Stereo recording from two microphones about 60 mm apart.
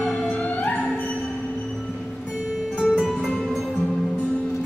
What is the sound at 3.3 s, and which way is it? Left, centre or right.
Music, centre.